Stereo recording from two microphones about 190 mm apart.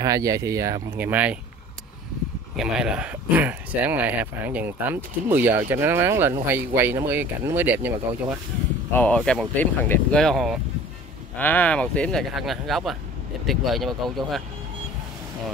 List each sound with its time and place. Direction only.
0.0 s speech: 20° right (ahead or behind)
2.5 s speech: 5° right (ahead or behind)
8.9 s speech: 5° left (ahead or behind)